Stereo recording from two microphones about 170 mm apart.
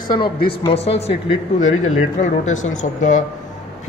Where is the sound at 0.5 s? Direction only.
35° left (ahead or behind).